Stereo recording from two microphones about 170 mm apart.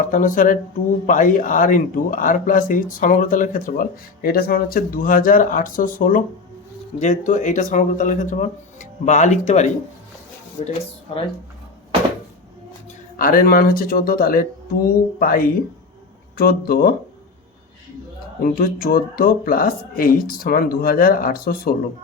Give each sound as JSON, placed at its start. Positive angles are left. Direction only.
{"t": 0.1, "sound": "speech", "side_deg": 50}
{"t": 13.1, "sound": "speech", "side_deg": 55}
{"t": 18.3, "sound": "speech", "side_deg": 55}